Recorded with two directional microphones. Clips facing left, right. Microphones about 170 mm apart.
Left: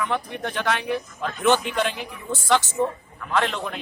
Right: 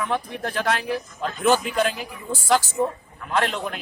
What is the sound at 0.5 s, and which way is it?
Speech, 35° right (ahead or behind).